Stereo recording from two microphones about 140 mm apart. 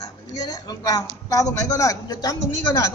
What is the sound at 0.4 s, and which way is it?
A woman's voice, 30° left (ahead or behind).